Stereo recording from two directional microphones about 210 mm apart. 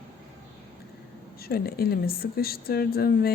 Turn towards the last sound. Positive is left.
turn(degrees=45)  # may be behind; listen again after turning